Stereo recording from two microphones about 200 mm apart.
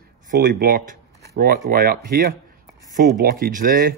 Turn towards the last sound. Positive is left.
turn(degrees=-45)  # may be behind; listen again after turning